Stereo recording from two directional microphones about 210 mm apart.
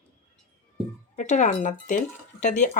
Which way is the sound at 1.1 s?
35° left (ahead or behind).